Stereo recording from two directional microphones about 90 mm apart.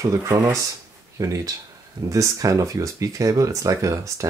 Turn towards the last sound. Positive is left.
turn(degrees=-35)  # may be behind; listen again after turning